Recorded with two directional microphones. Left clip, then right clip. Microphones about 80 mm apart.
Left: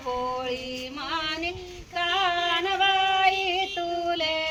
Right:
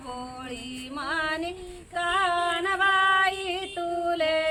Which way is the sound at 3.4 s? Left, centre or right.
Right.